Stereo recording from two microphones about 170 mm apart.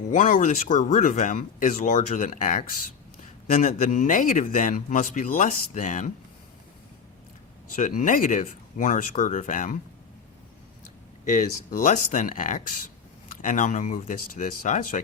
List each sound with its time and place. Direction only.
0.1 s speech: 50° left (ahead or behind)
7.8 s speech: 50° left (ahead or behind)
11.3 s speech: 50° left (ahead or behind)